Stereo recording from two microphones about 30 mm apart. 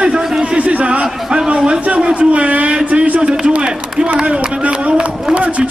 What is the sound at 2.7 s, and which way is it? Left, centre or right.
Speech, right.